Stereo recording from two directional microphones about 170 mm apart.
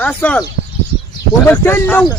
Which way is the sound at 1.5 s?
10° left (ahead or behind).